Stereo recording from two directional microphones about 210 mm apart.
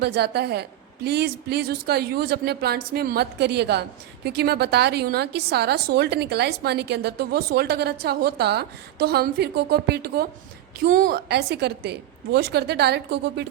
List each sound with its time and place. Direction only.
0.0 s a woman's voice: 50° right (ahead or behind)